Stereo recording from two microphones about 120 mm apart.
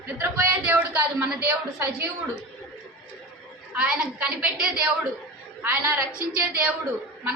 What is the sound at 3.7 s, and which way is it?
A woman's voice, 10° right (ahead or behind).